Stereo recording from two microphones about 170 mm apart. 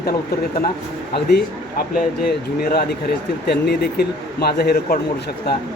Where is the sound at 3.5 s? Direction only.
75° left (ahead or behind).